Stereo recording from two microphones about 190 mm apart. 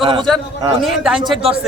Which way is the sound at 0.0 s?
25° right (ahead or behind).